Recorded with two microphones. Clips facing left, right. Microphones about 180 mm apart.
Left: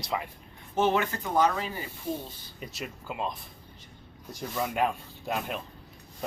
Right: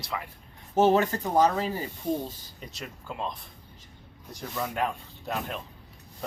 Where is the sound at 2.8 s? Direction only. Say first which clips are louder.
Left 1 dB; 5° left (ahead or behind).